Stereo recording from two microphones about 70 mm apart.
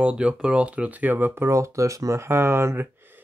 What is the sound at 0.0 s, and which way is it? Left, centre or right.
Speech, centre.